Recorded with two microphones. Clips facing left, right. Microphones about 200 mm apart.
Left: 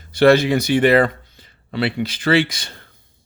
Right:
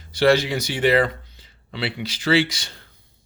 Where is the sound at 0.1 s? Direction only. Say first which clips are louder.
Left 5 dB; 55° left (ahead or behind).